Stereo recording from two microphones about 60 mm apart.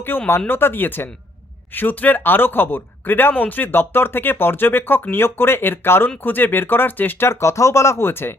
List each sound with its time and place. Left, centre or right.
0.3 s speech: left
7.3 s speech: left